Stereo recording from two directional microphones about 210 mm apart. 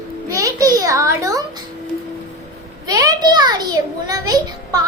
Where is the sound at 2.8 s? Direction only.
15° right (ahead or behind).